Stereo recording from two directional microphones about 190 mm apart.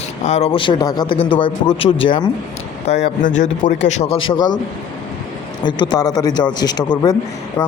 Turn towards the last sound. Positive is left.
turn(degrees=20)  # may be behind; listen again after turning